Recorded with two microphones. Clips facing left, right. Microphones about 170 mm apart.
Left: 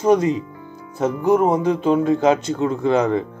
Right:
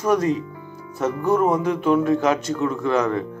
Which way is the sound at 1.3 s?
20° left (ahead or behind).